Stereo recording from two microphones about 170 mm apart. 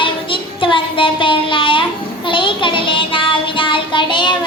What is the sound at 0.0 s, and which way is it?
Child singing, 30° left (ahead or behind).